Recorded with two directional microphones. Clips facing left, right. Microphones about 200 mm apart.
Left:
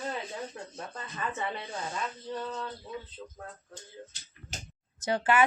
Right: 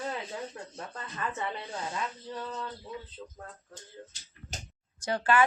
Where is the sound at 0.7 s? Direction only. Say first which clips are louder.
Even; 5° left (ahead or behind).